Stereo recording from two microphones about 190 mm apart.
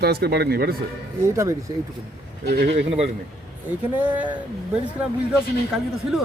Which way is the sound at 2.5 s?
45° right (ahead or behind).